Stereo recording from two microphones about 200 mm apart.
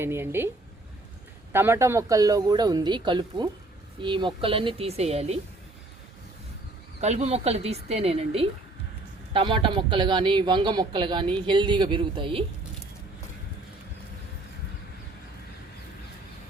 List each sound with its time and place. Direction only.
0.0 s speech: 10° right (ahead or behind)
1.5 s a man's voice: 10° right (ahead or behind); by 5.4 s 30° right (ahead or behind)
7.0 s a man's voice: 35° right (ahead or behind)